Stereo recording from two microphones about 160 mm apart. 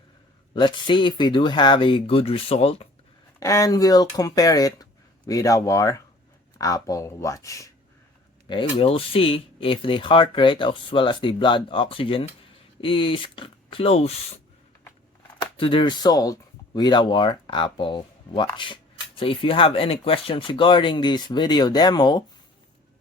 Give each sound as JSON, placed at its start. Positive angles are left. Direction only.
{"t": 0.5, "sound": "speech", "side_deg": 30}
{"t": 3.4, "sound": "speech", "side_deg": 20}
{"t": 8.4, "sound": "speech", "side_deg": 35}
{"t": 15.4, "sound": "speech", "side_deg": 35}